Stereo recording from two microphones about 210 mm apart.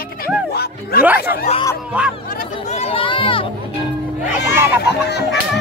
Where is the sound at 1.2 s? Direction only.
50° left (ahead or behind).